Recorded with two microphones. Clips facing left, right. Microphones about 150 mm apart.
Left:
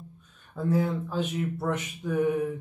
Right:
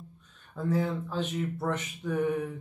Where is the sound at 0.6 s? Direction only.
5° left (ahead or behind).